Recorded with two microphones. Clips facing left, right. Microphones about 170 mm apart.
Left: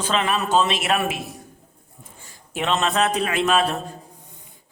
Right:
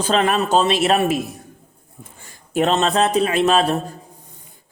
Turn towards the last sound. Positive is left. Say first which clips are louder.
# right 4 dB
turn(degrees=-35)  # may be behind; listen again after turning